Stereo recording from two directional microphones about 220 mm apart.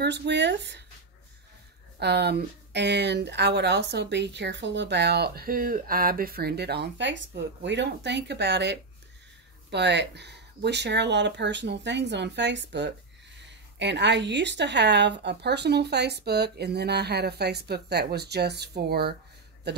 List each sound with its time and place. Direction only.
0.0 s speech: 50° right (ahead or behind)
2.0 s speech: 50° right (ahead or behind)